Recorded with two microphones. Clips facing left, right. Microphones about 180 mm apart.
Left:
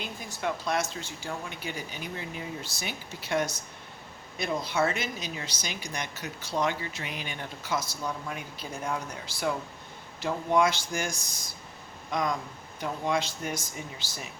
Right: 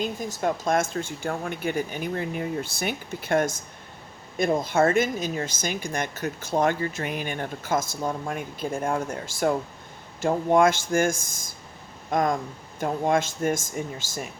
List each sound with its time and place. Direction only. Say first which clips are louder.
0.0 s speech: right 7 dB; 40° right (ahead or behind)